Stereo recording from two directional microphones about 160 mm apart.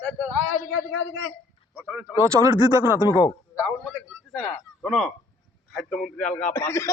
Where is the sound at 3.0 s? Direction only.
25° left (ahead or behind).